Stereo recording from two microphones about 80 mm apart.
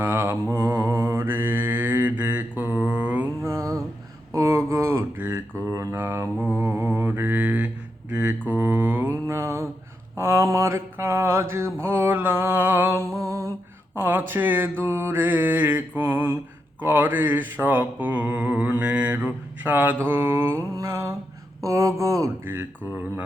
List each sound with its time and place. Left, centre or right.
0.0 s mantra: right
3.4 s a sound: right
5.1 s mantra: right
5.5 s mantra: right
9.2 s mantra: right
13.1 s lullaby: right
13.9 s mantra: right
21.6 s speech: right
22.4 s mantra: right